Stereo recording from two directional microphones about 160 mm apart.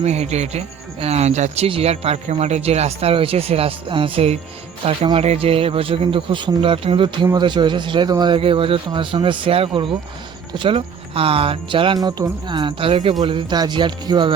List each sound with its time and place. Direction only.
0.0 s speech: 45° right (ahead or behind)